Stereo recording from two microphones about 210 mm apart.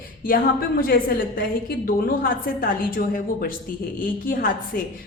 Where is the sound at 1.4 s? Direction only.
45° left (ahead or behind).